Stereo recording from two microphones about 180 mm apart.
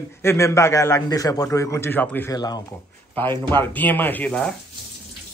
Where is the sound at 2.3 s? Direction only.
20° left (ahead or behind).